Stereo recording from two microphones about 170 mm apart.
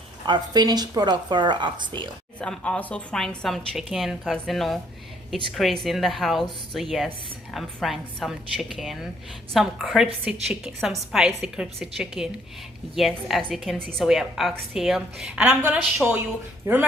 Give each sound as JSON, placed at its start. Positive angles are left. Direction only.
{"t": 0.3, "sound": "a woman's voice", "side_deg": -25}
{"t": 2.4, "sound": "a woman's voice", "side_deg": 5}